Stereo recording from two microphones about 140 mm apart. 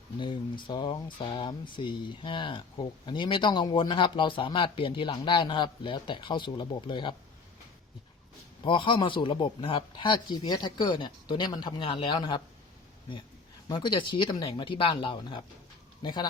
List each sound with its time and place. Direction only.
0.2 s speech: 35° left (ahead or behind)
8.6 s speech: 35° left (ahead or behind)
13.7 s speech: 35° left (ahead or behind)